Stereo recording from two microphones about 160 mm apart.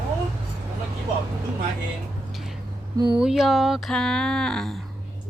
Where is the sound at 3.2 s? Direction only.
Centre (ahead or behind).